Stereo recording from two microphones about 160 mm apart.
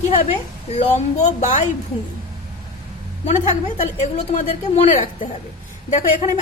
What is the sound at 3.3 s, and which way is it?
A woman's voice, 45° left (ahead or behind).